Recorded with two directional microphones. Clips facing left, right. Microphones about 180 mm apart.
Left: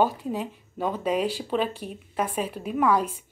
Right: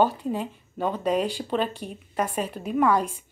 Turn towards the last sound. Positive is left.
turn(degrees=5)  # may be behind; listen again after turning